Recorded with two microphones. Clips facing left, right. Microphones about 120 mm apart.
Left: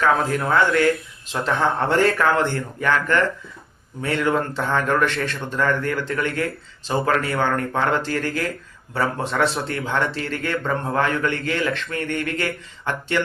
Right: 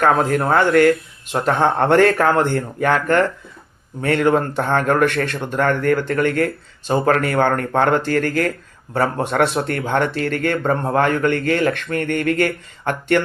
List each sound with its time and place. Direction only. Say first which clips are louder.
0.0 s a man's voice: right 4 dB; 45° right (ahead or behind)